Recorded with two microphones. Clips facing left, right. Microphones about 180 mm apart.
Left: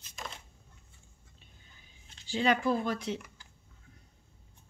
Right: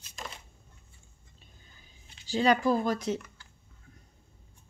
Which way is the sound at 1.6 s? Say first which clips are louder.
Right 2 dB; 40° right (ahead or behind).